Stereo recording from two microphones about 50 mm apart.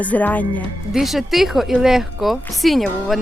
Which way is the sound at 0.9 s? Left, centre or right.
Centre.